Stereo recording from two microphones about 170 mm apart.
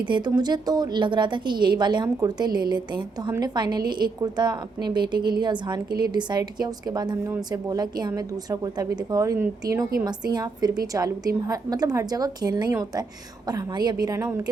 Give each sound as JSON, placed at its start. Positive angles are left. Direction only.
{"t": 0.0, "sound": "a woman's voice", "side_deg": -25}